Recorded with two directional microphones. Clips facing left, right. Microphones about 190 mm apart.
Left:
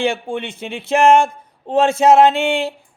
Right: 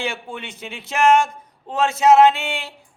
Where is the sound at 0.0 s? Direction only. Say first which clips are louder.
Left 8 dB; 30° left (ahead or behind).